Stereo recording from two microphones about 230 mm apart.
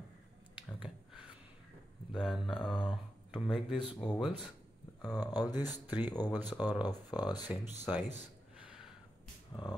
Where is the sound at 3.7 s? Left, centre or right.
Left.